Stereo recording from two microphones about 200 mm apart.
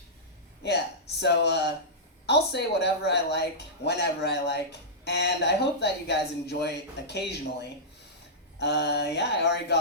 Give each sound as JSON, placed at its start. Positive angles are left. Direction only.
{"t": 1.2, "sound": "speech", "side_deg": 55}